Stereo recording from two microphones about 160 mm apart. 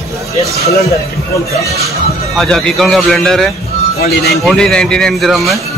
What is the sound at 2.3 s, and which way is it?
Speech, 5° left (ahead or behind).